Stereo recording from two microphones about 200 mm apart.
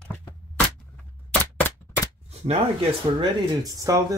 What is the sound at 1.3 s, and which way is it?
Cap gun, 10° left (ahead or behind).